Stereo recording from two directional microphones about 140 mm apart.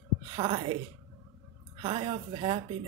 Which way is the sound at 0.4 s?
35° right (ahead or behind).